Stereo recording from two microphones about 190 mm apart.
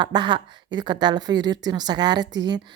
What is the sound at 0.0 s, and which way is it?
A woman's voice, 25° right (ahead or behind).